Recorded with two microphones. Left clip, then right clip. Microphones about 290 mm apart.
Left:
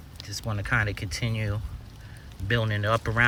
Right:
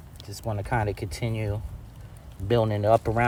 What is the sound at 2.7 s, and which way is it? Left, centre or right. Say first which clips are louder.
Speech: right 5 dB; centre.